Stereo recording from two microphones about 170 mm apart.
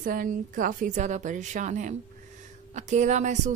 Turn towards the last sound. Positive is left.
turn(degrees=-45)  # may be behind; listen again after turning